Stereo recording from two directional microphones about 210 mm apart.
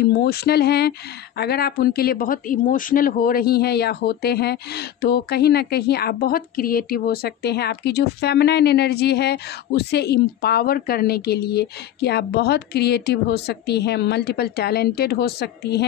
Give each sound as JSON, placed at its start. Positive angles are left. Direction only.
{"t": 0.1, "sound": "speech", "side_deg": 50}